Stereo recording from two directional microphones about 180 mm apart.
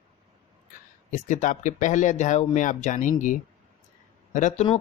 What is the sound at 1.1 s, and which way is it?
Speech, 45° left (ahead or behind).